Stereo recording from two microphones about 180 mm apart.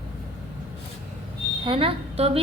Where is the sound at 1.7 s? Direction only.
30° right (ahead or behind).